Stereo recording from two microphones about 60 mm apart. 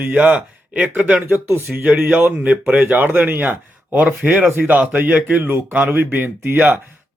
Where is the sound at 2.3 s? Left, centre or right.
Right.